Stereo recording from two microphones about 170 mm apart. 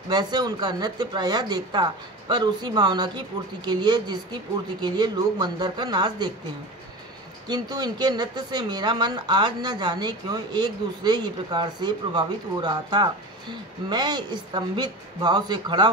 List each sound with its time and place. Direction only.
0.1 s speech: 25° right (ahead or behind)
7.4 s speech: 25° right (ahead or behind)